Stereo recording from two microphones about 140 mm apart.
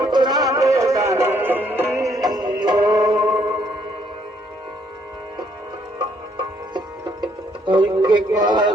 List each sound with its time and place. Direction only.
0.0 s music: 30° right (ahead or behind)
6.3 s music: 35° right (ahead or behind)